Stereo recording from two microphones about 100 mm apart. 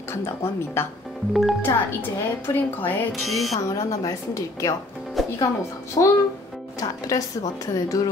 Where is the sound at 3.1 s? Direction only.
Centre (ahead or behind).